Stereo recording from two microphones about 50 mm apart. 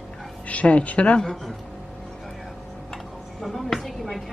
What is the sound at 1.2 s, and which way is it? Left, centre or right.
Speech, centre.